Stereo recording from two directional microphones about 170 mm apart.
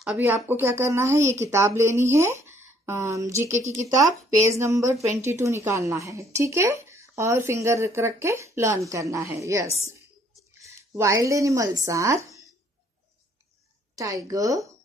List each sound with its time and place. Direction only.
0.0 s a woman's voice: 5° right (ahead or behind)
13.9 s a woman's voice: 20° right (ahead or behind)